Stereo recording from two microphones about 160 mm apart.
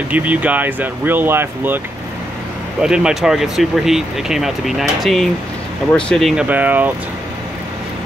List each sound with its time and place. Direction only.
0.1 s speech: 10° right (ahead or behind)
2.8 s speech: 5° right (ahead or behind)